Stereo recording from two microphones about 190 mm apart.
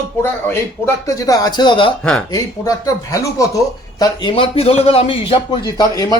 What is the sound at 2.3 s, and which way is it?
Speech, 20° left (ahead or behind).